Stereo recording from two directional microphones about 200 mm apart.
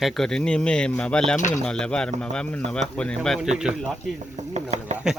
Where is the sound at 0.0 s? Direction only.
5° left (ahead or behind).